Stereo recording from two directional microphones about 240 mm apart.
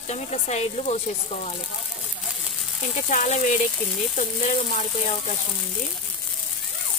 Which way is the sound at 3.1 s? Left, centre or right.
Left.